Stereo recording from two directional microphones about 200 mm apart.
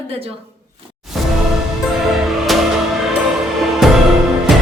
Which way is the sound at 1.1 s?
Centre (ahead or behind).